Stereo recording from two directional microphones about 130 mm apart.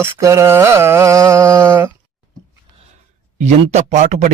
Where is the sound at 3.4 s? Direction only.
65° right (ahead or behind).